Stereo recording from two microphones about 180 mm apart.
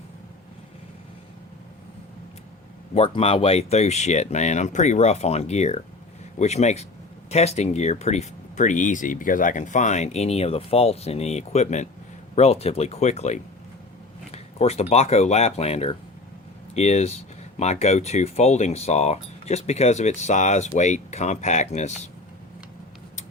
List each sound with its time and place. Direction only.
2.9 s speech: 35° left (ahead or behind)